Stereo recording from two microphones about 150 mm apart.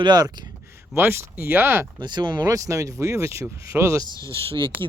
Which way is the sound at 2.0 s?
30° right (ahead or behind).